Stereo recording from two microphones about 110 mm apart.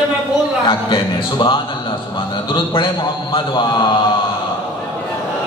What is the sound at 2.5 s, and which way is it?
Speech, 45° left (ahead or behind).